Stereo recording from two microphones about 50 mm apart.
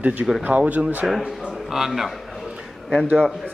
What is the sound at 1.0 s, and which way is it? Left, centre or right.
Speech, centre.